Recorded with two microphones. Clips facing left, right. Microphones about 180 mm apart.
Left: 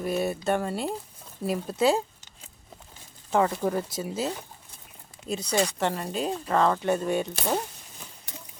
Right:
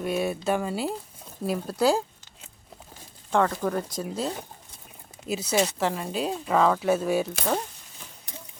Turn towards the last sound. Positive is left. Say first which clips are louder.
# right 1 dB
turn(degrees=0)  # may be behind; listen again after turning